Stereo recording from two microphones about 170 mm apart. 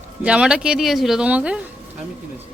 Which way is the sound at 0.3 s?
5° right (ahead or behind).